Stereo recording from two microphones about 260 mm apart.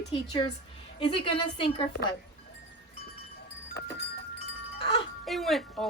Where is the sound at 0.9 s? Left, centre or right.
Left.